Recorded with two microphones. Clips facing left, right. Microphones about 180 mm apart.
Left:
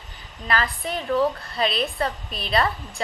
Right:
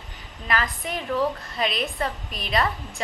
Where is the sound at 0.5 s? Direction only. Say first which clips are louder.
Left 2 dB; 15° right (ahead or behind).